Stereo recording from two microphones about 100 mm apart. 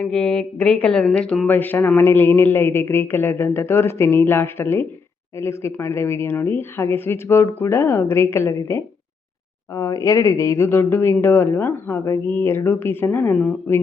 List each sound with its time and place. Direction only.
0.0 s speech: 10° left (ahead or behind)